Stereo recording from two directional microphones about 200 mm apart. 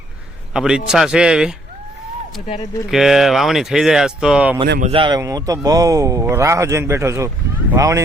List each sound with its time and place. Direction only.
0.5 s speech: 5° right (ahead or behind)
2.9 s speech: centre (ahead or behind)
4.8 s speech: 25° right (ahead or behind)